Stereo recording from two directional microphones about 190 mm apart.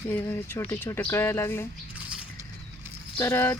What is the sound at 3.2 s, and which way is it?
Speech, 10° left (ahead or behind).